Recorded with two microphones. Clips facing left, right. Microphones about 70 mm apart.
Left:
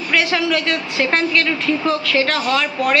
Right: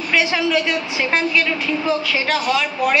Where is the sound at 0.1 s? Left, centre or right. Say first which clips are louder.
Even; centre.